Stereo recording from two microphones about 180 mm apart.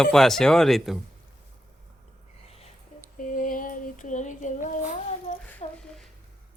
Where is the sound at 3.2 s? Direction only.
50° left (ahead or behind).